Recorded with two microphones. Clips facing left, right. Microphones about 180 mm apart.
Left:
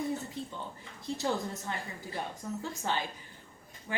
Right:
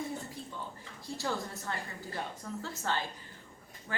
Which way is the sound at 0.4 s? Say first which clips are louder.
Left 5 dB; 25° left (ahead or behind).